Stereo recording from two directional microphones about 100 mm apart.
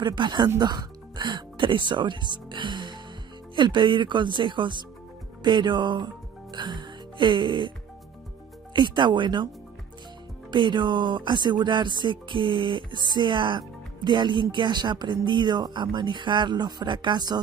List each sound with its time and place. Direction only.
0.0 s speech: 50° right (ahead or behind)
8.7 s speech: 50° right (ahead or behind)
10.5 s speech: 50° right (ahead or behind)